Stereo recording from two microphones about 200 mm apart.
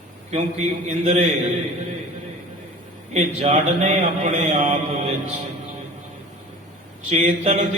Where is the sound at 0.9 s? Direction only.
30° right (ahead or behind).